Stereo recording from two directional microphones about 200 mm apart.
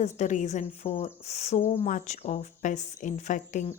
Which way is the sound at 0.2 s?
35° left (ahead or behind).